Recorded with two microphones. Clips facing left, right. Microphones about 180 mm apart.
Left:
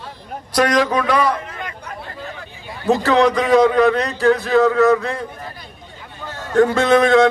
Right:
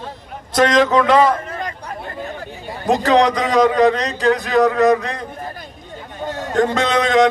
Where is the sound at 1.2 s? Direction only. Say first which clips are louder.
Right 3 dB; 45° right (ahead or behind).